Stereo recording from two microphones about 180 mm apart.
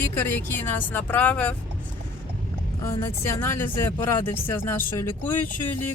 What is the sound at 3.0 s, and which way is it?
Speech, 15° left (ahead or behind).